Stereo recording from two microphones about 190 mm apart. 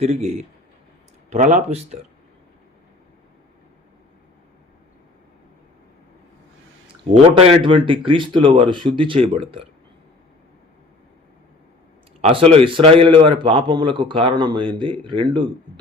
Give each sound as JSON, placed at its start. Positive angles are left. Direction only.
{"t": 0.0, "sound": "speech", "side_deg": -35}
{"t": 6.8, "sound": "a man's voice", "side_deg": -30}
{"t": 12.3, "sound": "a man's voice", "side_deg": -30}